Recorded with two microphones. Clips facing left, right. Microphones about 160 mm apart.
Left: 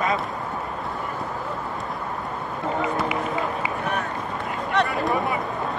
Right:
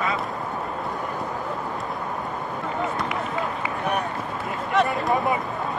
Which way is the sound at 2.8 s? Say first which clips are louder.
Left 2 dB; 5° left (ahead or behind).